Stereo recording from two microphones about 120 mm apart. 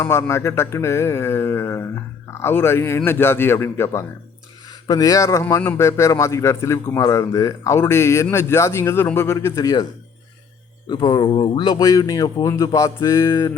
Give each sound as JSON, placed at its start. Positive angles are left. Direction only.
{"t": 0.1, "sound": "a man's voice", "side_deg": 20}
{"t": 10.8, "sound": "speech", "side_deg": 40}